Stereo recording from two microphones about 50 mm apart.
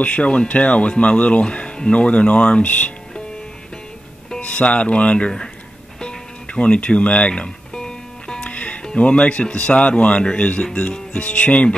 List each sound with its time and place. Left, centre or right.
0.0 s speech: left
4.4 s speech: left
5.9 s music: centre
8.5 s music: left
8.8 s speech: left